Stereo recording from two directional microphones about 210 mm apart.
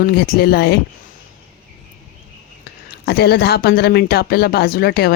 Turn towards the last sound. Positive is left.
turn(degrees=45)  # may be behind; listen again after turning